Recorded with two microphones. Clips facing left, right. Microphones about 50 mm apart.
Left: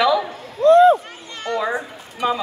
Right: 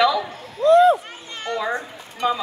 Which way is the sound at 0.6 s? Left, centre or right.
Left.